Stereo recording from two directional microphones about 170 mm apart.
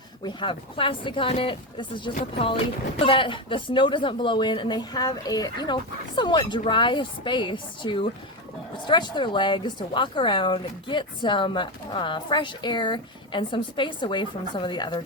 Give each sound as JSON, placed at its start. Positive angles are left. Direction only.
{"t": 0.3, "sound": "a woman's voice", "side_deg": 30}